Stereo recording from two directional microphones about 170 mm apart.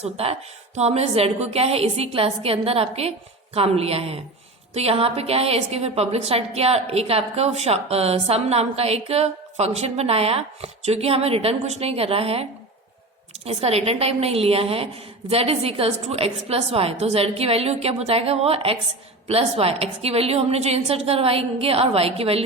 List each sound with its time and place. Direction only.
0.0 s a woman's voice: 35° right (ahead or behind)